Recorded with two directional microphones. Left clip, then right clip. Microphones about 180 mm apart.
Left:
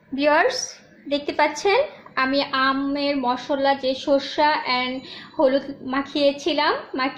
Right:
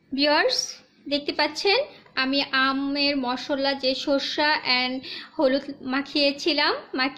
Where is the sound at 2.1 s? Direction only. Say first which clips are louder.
Left 2 dB; 50° right (ahead or behind).